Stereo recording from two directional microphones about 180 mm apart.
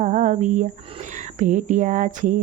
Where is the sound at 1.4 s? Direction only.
45° right (ahead or behind).